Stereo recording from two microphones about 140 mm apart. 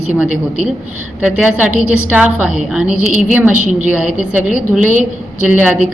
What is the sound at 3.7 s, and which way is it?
Speech, 60° right (ahead or behind).